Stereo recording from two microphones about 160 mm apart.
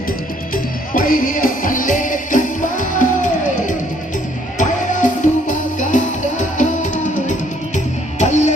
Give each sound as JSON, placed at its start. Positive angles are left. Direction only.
{"t": 0.5, "sound": "music", "side_deg": 55}
{"t": 4.5, "sound": "music", "side_deg": 50}